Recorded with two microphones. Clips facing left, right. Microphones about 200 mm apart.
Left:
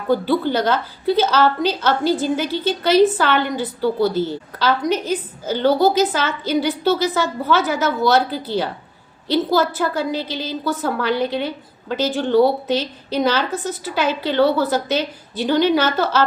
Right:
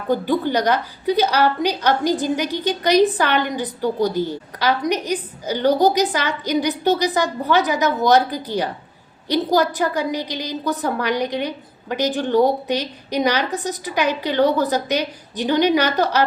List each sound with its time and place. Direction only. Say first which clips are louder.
0.1 s a woman's voice: left 1 dB; 15° right (ahead or behind)